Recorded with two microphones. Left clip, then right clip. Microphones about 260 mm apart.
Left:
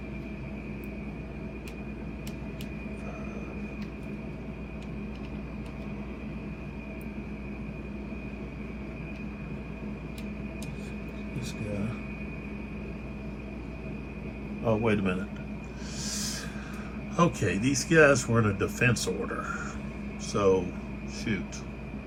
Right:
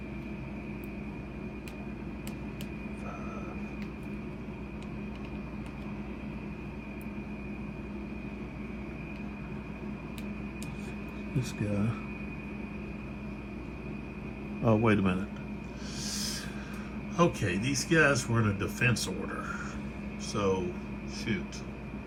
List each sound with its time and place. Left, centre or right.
14.6 s a man's voice: right
16.0 s a sound: centre
17.2 s speech: centre
20.3 s speech: centre